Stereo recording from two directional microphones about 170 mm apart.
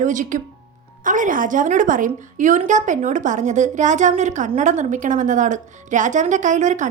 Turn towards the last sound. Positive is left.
turn(degrees=-45)  # may be behind; listen again after turning